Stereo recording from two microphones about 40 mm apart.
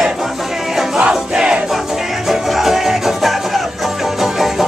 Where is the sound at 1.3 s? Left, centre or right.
Centre.